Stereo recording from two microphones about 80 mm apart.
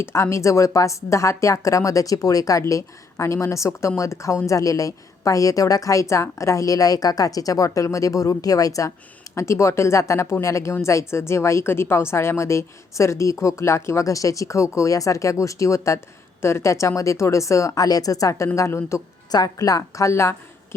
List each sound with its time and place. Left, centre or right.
0.0 s a woman's voice: left
19.3 s a woman's voice: left